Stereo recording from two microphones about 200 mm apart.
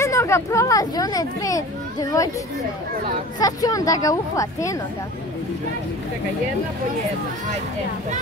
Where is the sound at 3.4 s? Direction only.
20° left (ahead or behind).